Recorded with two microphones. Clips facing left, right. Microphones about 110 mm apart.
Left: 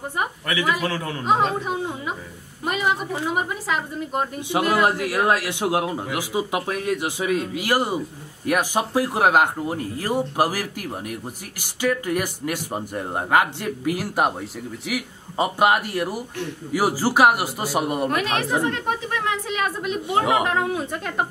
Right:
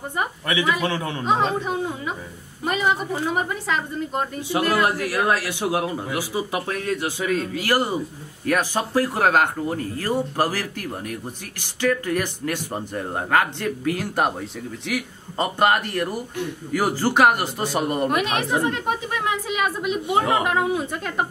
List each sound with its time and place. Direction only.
0.5 s speech: 25° right (ahead or behind)
1.2 s a woman's voice: 5° left (ahead or behind)
4.4 s a man's voice: 20° left (ahead or behind); by 18.1 s 5° left (ahead or behind)
18.1 s a woman's voice: 15° right (ahead or behind)